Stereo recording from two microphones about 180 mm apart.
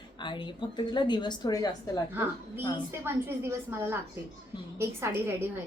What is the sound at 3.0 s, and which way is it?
A woman's voice, 10° right (ahead or behind).